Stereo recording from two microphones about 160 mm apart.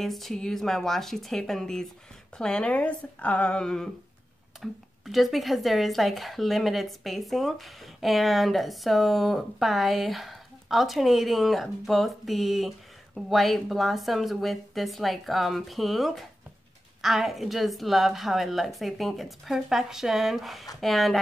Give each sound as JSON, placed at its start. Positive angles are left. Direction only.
{"t": 0.0, "sound": "speech", "side_deg": 0}